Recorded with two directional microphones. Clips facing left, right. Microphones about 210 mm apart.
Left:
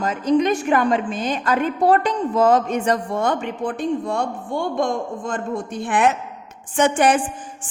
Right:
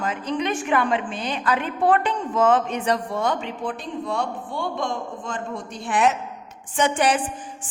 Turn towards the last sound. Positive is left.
turn(degrees=50)  # may be behind; listen again after turning